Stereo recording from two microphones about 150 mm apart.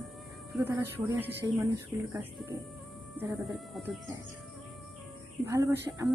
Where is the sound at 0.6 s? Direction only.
15° right (ahead or behind).